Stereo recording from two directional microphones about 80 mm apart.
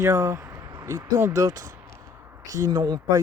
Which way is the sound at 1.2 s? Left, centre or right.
Right.